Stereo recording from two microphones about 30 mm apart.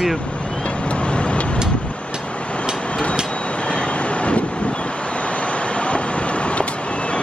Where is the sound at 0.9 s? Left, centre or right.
Left.